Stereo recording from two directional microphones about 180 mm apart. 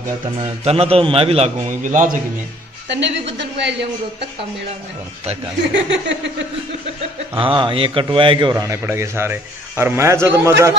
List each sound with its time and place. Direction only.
0.2 s a man's voice: 30° right (ahead or behind)
2.9 s speech: 80° right
5.8 s speech: 80° right
7.3 s a man's voice: 30° right (ahead or behind)